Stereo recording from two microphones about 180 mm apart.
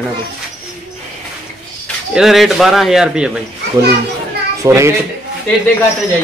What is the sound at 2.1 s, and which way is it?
Speech, centre (ahead or behind).